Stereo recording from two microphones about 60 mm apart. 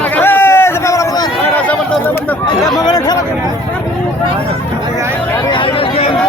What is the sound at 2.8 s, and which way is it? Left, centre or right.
Speech, left.